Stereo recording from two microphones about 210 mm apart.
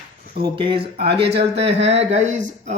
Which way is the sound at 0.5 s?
25° right (ahead or behind).